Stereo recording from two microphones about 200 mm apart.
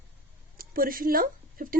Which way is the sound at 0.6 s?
45° right (ahead or behind).